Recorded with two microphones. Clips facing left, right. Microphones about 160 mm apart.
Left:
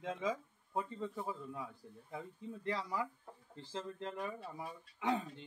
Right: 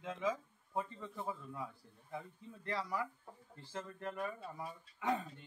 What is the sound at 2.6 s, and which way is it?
Speech, 20° left (ahead or behind).